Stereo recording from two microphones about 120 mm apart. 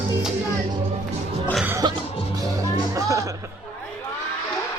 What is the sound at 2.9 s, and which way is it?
Music, 25° right (ahead or behind).